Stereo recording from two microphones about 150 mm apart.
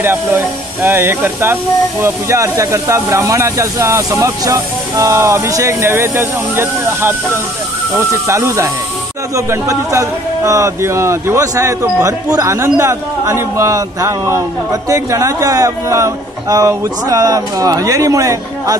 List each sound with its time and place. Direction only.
0.0 s a man's voice: 15° right (ahead or behind)